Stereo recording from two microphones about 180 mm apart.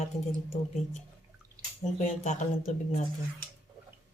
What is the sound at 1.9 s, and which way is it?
Speech, 40° left (ahead or behind).